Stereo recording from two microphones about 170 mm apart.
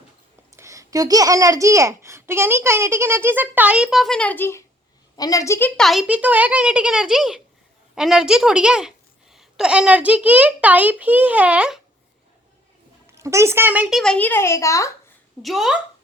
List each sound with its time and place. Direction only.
0.5 s a child's voice: 15° right (ahead or behind)
13.1 s a woman's voice: 15° right (ahead or behind)
14.0 s a woman's voice: 5° left (ahead or behind)
15.4 s speech: centre (ahead or behind)